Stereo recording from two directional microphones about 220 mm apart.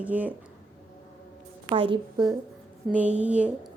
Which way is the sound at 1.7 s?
25° right (ahead or behind).